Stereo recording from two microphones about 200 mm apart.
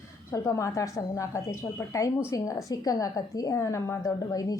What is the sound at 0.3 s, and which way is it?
A woman's voice, 15° left (ahead or behind).